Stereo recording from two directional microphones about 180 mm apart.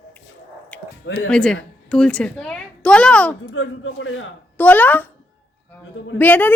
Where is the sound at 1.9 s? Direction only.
5° left (ahead or behind).